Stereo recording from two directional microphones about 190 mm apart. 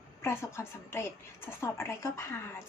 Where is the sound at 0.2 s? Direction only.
15° left (ahead or behind).